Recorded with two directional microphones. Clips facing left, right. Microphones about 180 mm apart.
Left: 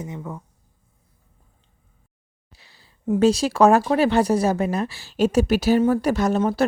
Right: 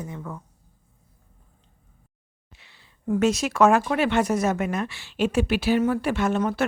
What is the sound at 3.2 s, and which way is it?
Speech, 30° left (ahead or behind).